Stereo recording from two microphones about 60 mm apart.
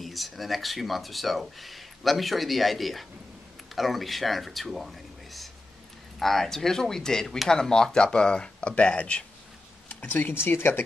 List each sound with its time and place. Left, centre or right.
0.0 s speech: centre
10.1 s speech: left